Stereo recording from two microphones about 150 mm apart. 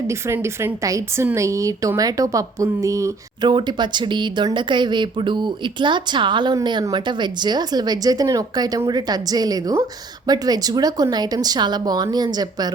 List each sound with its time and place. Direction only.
0.1 s a woman's voice: 20° right (ahead or behind)